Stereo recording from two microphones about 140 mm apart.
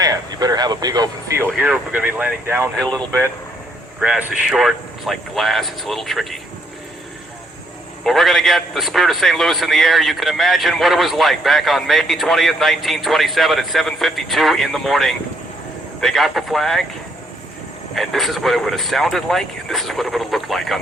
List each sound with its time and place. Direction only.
0.0 s speech: 30° right (ahead or behind)
1.4 s speech: 10° right (ahead or behind)
4.0 s a man's voice: 5° right (ahead or behind)
8.0 s a man's voice: centre (ahead or behind)
17.9 s a man's voice: centre (ahead or behind)